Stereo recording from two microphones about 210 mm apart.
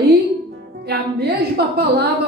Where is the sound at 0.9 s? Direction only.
50° right (ahead or behind).